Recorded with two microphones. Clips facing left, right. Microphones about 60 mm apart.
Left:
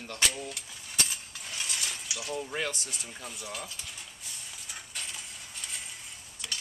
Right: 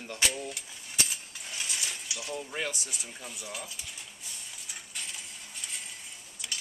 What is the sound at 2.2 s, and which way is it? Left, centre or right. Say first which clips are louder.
Speech: left 2 dB; centre.